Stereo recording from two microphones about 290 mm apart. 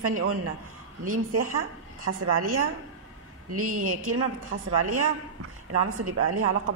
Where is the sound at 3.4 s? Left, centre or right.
Right.